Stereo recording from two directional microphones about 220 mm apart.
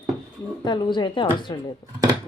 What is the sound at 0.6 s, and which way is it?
A woman's voice, 20° left (ahead or behind).